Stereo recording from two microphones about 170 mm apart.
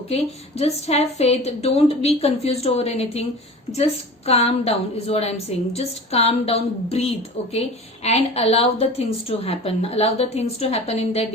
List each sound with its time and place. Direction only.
0.1 s a woman's voice: 35° left (ahead or behind)
4.3 s a woman's voice: 35° left (ahead or behind)